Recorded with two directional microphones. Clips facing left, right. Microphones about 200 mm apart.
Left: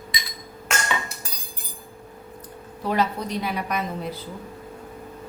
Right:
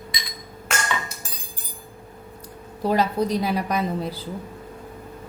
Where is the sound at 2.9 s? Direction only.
35° right (ahead or behind).